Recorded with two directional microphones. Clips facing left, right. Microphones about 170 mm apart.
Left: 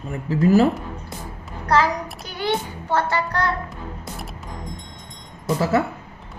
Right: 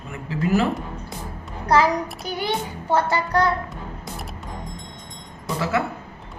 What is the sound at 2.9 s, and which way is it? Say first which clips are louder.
Speech: right 2 dB; 10° right (ahead or behind).